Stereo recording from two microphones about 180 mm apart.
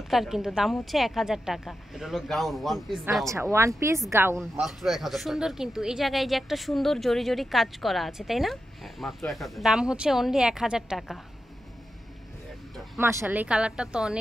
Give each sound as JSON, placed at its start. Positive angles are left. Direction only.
{"t": 0.1, "sound": "speech", "side_deg": 0}
{"t": 3.5, "sound": "a woman's voice", "side_deg": -15}
{"t": 4.4, "sound": "speech", "side_deg": 0}
{"t": 13.0, "sound": "speech", "side_deg": -15}